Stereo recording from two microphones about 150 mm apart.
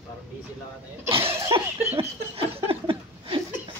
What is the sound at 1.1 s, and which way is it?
Speech, 40° right (ahead or behind).